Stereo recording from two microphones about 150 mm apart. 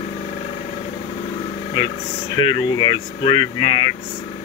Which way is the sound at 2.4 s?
35° left (ahead or behind).